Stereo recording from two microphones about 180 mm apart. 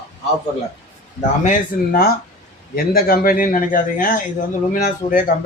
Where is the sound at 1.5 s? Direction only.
55° left (ahead or behind).